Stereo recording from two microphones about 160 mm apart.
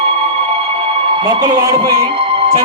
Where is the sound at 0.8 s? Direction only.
30° right (ahead or behind).